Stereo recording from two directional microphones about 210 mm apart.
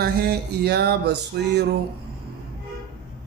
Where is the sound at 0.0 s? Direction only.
50° right (ahead or behind).